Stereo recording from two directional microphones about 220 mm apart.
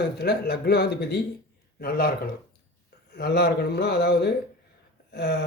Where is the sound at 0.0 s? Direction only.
45° left (ahead or behind).